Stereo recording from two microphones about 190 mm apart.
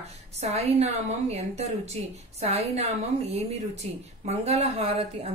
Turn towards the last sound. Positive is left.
turn(degrees=-30)  # may be behind; listen again after turning